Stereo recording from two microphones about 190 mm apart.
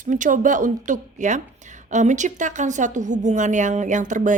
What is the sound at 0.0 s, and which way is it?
A woman's voice, 45° right (ahead or behind).